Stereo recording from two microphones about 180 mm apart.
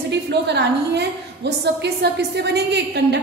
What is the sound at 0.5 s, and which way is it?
A woman's voice, 70° right (ahead or behind).